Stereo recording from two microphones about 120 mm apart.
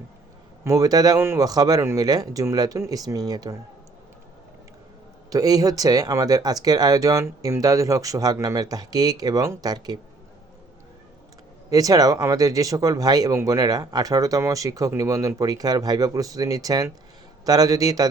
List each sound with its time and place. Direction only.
0.6 s speech: 30° right (ahead or behind)
5.3 s speech: 30° right (ahead or behind)
11.7 s speech: 30° right (ahead or behind)